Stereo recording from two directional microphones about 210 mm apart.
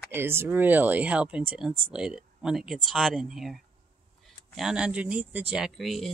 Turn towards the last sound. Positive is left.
turn(degrees=0)  # may be behind; listen again after turning